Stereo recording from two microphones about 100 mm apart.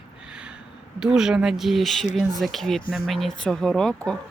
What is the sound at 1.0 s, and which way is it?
Speech, 5° right (ahead or behind).